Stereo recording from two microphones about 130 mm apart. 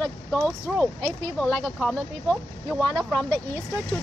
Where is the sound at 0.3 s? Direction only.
10° left (ahead or behind).